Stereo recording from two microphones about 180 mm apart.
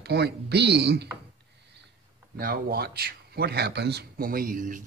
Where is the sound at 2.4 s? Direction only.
55° right (ahead or behind).